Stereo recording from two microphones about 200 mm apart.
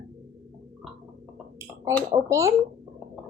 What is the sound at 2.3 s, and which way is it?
Speech, 15° right (ahead or behind).